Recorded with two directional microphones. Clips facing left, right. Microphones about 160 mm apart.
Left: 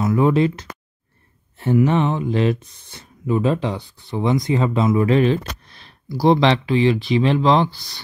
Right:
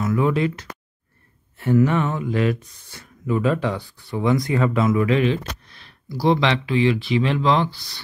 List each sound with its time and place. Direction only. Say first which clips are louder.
0.0 s speech: left 4 dB; 30° left (ahead or behind)
1.9 s speech: left 3 dB; 25° left (ahead or behind)